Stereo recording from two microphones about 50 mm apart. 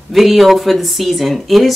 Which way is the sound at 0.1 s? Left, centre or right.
Centre.